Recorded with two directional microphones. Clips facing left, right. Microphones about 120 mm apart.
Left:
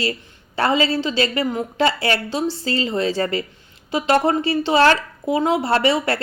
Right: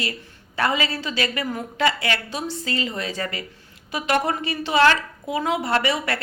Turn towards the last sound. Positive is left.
turn(degrees=30)  # may be behind; listen again after turning